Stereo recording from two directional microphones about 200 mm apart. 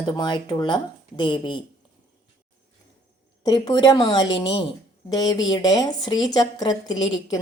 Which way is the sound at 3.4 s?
20° left (ahead or behind).